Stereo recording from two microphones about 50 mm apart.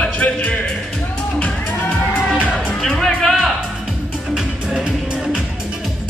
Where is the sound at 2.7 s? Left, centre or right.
Centre.